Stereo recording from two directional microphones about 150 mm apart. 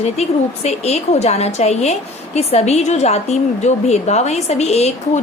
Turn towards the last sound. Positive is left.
turn(degrees=45)  # may be behind; listen again after turning